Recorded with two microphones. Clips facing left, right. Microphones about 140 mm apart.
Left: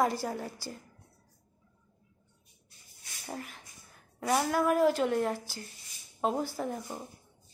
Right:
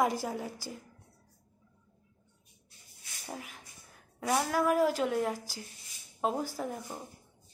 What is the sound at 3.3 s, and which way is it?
Speech, 5° right (ahead or behind).